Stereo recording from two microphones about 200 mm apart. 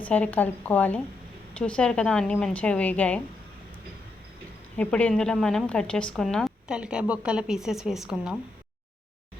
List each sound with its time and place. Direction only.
0.0 s a woman's voice: 5° left (ahead or behind)
4.8 s a woman's voice: 5° left (ahead or behind)